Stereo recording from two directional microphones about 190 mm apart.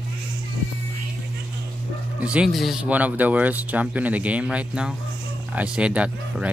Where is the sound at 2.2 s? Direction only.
5° right (ahead or behind).